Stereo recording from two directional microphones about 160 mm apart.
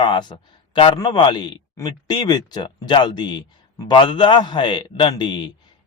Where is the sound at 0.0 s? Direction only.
30° left (ahead or behind).